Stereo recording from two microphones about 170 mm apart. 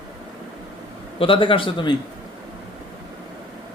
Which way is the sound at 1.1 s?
30° left (ahead or behind).